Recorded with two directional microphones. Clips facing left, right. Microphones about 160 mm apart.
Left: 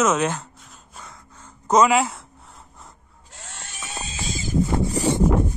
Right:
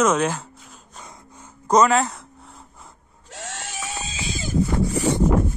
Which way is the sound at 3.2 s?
90° right.